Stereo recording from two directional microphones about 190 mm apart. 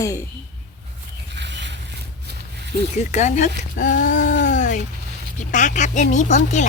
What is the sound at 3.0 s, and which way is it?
Speech, 40° left (ahead or behind).